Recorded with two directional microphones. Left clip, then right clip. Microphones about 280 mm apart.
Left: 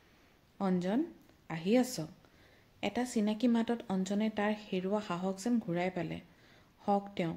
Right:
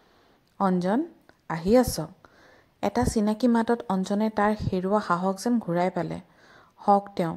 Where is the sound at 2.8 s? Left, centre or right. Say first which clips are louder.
Right 9 dB; right.